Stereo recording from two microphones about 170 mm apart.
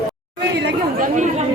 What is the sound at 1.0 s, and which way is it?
Speech, 45° right (ahead or behind).